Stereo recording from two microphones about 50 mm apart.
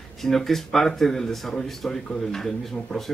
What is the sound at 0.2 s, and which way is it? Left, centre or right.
Speech, centre.